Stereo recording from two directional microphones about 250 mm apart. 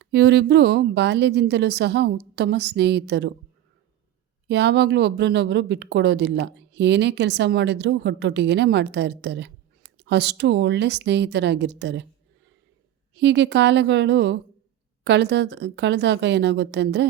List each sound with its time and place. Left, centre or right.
0.0 s speech: right
4.4 s speech: right
13.1 s speech: right